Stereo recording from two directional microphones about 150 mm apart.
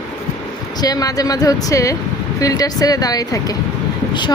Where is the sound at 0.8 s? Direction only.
25° left (ahead or behind).